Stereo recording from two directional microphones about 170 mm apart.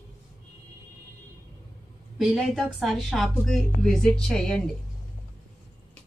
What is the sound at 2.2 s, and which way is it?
A woman's voice, centre (ahead or behind).